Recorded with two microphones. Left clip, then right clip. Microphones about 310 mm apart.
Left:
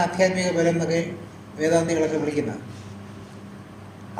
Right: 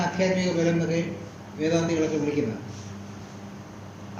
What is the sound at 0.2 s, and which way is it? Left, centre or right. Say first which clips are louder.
Speech: left 3 dB; left.